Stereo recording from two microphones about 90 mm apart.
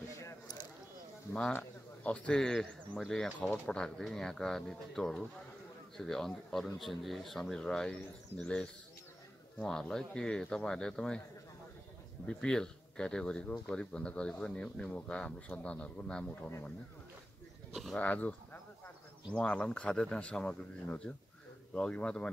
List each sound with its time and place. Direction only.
1.5 s speech: 15° left (ahead or behind); by 3.3 s centre (ahead or behind)
3.3 s speech: 15° left (ahead or behind)
12.3 s speech: 10° left (ahead or behind)
17.9 s speech: 15° left (ahead or behind)